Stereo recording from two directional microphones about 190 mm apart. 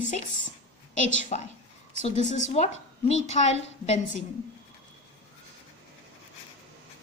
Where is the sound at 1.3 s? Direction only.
40° left (ahead or behind).